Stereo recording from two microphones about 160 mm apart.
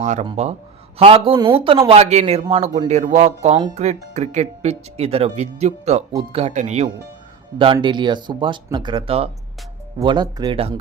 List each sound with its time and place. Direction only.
0.0 s speech: 45° right (ahead or behind)
7.6 s speech: 30° right (ahead or behind)